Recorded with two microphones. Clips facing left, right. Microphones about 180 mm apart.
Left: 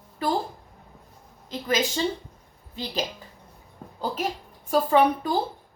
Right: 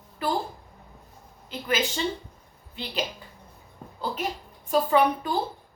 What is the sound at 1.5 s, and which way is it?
Speech, 35° left (ahead or behind).